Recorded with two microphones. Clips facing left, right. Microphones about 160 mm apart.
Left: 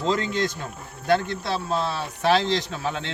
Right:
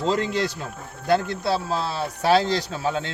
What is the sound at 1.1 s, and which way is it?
Speech, 35° right (ahead or behind).